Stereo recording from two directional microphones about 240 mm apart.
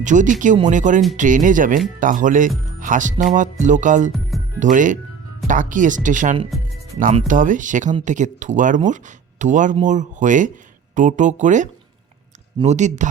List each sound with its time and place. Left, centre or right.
0.0 s speech: right